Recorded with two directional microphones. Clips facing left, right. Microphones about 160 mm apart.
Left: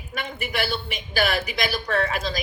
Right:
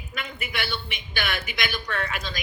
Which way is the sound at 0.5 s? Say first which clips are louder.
Left 5 dB; 35° left (ahead or behind).